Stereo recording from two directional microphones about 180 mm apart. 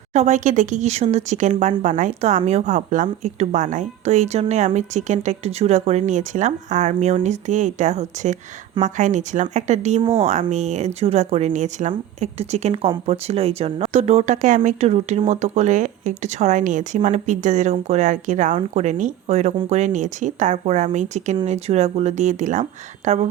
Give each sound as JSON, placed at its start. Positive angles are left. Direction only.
{"t": 0.1, "sound": "speech", "side_deg": -40}